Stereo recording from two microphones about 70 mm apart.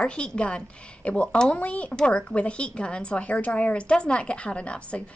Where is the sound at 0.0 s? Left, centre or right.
Centre.